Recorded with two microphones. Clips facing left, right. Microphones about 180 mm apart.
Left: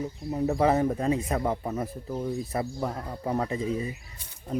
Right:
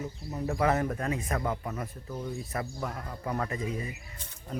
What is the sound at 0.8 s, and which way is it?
Speech, 15° left (ahead or behind).